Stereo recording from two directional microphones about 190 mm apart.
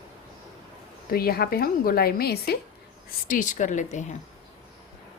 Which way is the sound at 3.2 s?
45° left (ahead or behind).